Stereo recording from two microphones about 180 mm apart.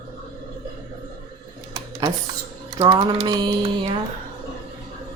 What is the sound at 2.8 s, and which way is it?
Speech, 25° right (ahead or behind).